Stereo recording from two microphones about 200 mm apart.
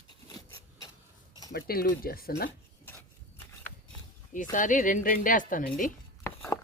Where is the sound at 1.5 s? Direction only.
50° left (ahead or behind).